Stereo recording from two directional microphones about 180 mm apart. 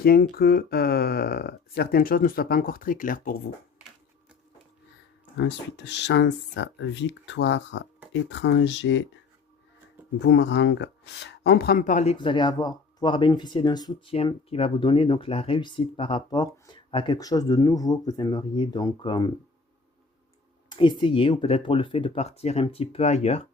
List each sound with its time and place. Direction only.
0.0 s speech: 55° left (ahead or behind)
5.4 s speech: 75° left (ahead or behind)
10.2 s speech: 75° left (ahead or behind); by 12.1 s 45° left (ahead or behind)
12.1 s speech: 25° left (ahead or behind)
20.7 s speech: 25° left (ahead or behind)